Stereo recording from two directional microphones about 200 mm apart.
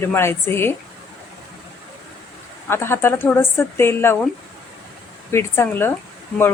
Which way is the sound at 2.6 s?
10° left (ahead or behind).